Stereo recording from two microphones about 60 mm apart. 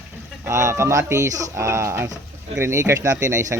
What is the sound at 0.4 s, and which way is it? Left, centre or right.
Speech, right.